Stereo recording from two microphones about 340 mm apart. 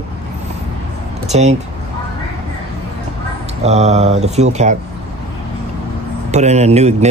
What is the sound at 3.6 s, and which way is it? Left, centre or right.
Speech, centre.